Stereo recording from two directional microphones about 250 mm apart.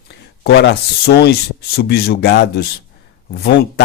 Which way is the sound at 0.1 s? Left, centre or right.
Left.